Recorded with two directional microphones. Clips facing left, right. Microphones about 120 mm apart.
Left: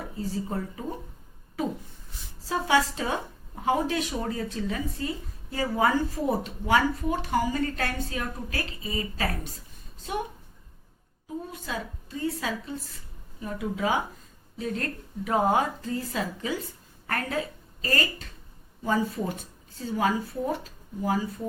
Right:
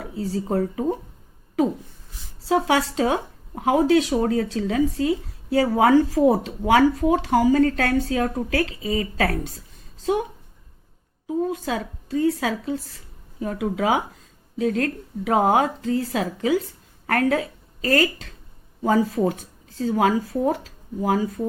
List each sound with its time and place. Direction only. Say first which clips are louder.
0.0 s speech: right 5 dB; 75° right (ahead or behind)
2.5 s speech: right 4 dB; 85° right
11.4 s a woman's voice: right 9 dB; 90° right